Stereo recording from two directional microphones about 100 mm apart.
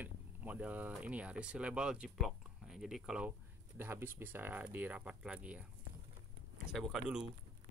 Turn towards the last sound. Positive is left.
turn(degrees=-10)  # may be behind; listen again after turning